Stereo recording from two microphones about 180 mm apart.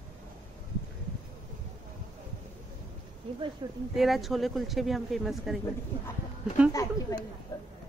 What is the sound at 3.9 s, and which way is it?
Speech, centre (ahead or behind).